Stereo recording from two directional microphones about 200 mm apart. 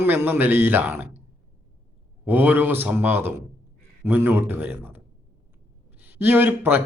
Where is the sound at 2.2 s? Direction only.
10° right (ahead or behind).